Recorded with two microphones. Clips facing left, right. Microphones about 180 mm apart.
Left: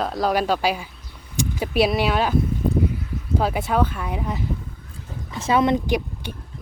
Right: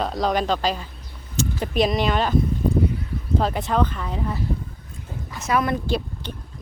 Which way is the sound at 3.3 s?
5° left (ahead or behind).